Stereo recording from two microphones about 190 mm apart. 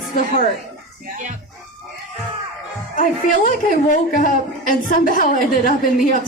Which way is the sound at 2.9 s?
45° left (ahead or behind).